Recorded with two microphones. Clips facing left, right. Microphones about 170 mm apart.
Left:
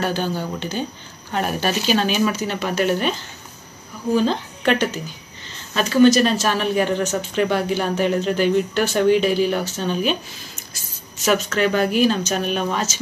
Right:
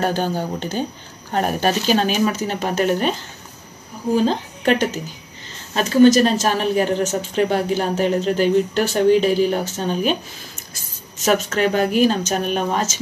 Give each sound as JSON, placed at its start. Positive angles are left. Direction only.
{"t": 0.0, "sound": "speech", "side_deg": -45}
{"t": 11.2, "sound": "speech", "side_deg": -45}